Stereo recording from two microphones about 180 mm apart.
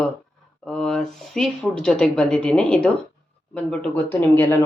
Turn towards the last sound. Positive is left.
turn(degrees=10)  # may be behind; listen again after turning